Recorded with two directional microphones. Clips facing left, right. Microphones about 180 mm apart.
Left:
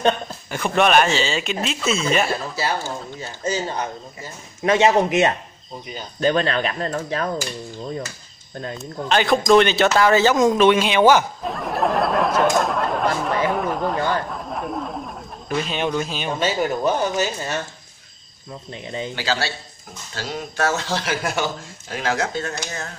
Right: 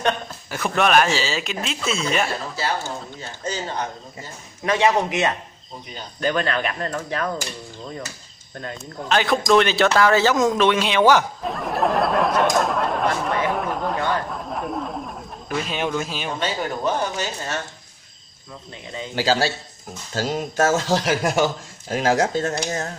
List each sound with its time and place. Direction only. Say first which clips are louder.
0.7 s speech: left 1 dB; centre (ahead or behind)
4.6 s speech: left 3 dB; 25° left (ahead or behind)
9.1 s speech: left 2 dB; centre (ahead or behind)
16.3 s speech: left 5 dB; 10° left (ahead or behind)
19.1 s speech: right 7 dB; 40° right (ahead or behind)